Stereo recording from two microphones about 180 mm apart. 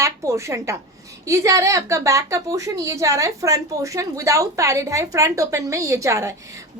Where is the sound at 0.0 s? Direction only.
15° right (ahead or behind).